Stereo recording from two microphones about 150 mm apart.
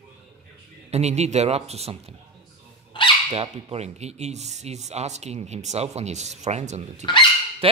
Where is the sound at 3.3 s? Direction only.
45° right (ahead or behind).